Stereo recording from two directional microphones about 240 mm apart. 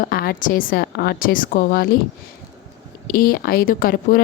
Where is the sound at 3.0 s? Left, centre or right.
Left.